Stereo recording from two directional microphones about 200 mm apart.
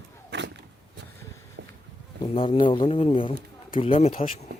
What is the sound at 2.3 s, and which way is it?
Speech, 25° left (ahead or behind).